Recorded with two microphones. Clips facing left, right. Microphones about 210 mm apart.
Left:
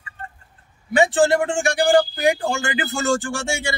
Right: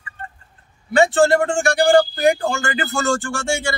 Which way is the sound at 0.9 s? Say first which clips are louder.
Right 2 dB; 15° left (ahead or behind).